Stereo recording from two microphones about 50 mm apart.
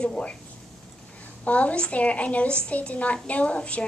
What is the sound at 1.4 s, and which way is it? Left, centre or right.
Speech, left.